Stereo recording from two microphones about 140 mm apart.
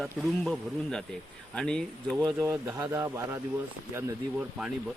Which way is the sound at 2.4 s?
15° right (ahead or behind).